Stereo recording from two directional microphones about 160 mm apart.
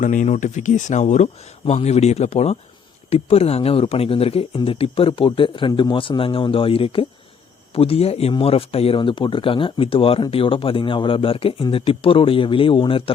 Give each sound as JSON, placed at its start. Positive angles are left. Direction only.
{"t": 0.0, "sound": "speech", "side_deg": 55}